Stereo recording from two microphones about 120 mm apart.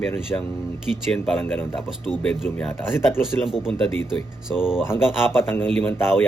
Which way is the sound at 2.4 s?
15° left (ahead or behind).